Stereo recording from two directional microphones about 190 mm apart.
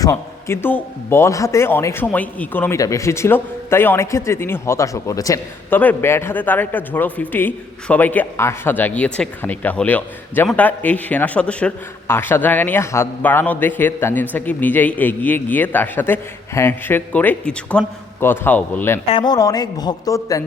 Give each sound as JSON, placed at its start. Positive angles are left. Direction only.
{"t": 0.0, "sound": "a man's voice", "side_deg": 15}
{"t": 19.1, "sound": "a woman's voice", "side_deg": 20}